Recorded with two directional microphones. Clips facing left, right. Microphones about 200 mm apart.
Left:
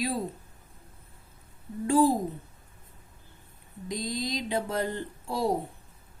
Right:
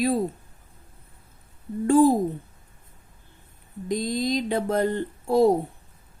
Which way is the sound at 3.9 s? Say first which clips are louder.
Right 7 dB; 55° right (ahead or behind).